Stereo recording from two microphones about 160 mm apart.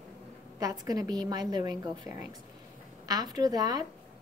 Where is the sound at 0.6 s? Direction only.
25° right (ahead or behind).